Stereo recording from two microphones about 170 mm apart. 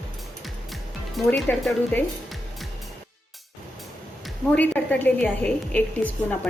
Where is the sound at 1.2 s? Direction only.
5° left (ahead or behind).